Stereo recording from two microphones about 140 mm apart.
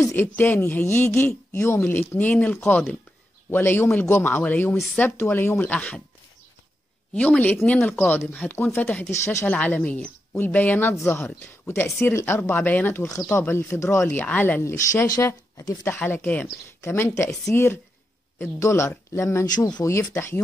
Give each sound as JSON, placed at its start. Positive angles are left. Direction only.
{"t": 0.1, "sound": "speech", "side_deg": 15}
{"t": 7.2, "sound": "speech", "side_deg": 10}